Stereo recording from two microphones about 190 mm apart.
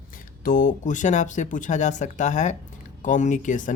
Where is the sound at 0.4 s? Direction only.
45° left (ahead or behind).